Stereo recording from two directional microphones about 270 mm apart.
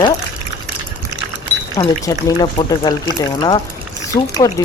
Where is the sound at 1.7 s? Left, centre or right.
Centre.